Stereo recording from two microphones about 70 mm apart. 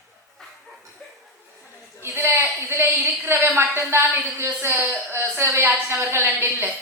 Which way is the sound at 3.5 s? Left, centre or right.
Right.